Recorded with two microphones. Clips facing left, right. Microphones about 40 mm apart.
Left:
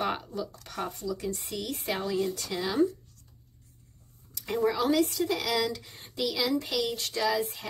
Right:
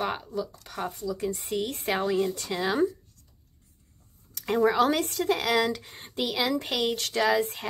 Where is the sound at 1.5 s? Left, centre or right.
Right.